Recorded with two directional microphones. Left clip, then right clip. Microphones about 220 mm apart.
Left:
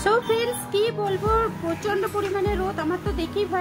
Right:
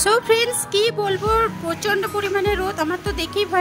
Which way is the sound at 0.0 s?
40° right (ahead or behind).